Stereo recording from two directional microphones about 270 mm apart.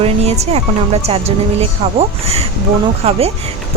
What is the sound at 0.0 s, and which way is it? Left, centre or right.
Speech, right.